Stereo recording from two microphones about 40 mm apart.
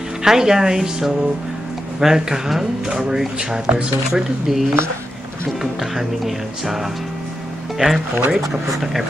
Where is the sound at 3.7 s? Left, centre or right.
Right.